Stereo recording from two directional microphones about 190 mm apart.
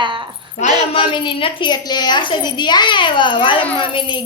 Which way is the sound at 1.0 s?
25° left (ahead or behind).